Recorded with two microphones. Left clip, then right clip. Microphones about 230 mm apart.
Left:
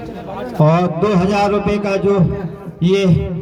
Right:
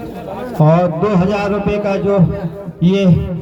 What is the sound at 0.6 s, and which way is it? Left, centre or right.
A man's voice, left.